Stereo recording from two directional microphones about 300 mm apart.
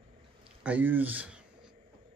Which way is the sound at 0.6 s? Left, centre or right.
Centre.